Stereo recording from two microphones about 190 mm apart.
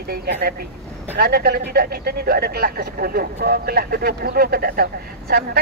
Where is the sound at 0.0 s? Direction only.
55° right (ahead or behind).